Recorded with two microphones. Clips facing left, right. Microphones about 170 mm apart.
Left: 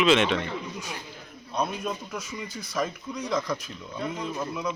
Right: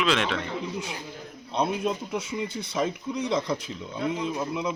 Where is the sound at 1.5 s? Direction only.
25° right (ahead or behind).